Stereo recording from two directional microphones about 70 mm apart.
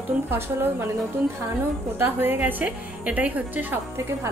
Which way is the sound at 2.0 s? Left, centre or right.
Right.